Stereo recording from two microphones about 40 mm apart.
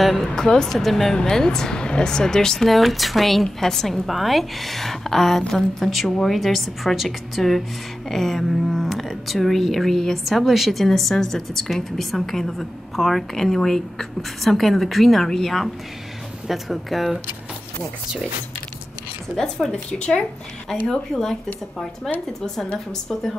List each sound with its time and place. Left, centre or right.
0.0 s a woman's voice: centre
0.3 s speech: centre
0.7 s a woman's voice: centre
1.1 s speech: centre
2.8 s a woman's voice: centre
5.9 s a woman's voice: centre
19.3 s speech: centre
19.9 s speech: left
20.8 s speech: centre